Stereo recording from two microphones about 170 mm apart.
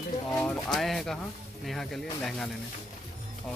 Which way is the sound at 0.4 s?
5° left (ahead or behind).